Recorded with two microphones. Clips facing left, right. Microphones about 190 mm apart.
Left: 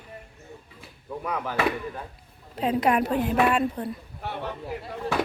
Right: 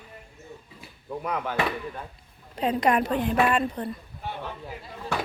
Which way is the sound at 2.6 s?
5° left (ahead or behind).